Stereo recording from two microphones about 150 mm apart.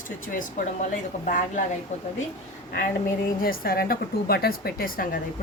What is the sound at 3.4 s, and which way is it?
Speech, 80° left.